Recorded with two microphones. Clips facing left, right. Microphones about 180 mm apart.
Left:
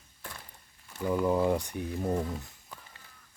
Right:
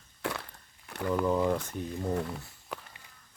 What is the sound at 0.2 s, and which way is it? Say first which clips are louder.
Walk: right 12 dB; 75° right (ahead or behind).